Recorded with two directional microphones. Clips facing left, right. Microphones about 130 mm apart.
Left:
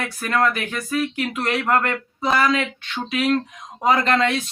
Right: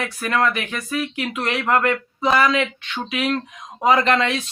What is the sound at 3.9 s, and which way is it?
Speech, 40° left (ahead or behind).